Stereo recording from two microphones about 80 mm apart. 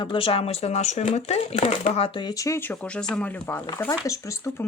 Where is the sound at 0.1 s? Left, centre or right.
Left.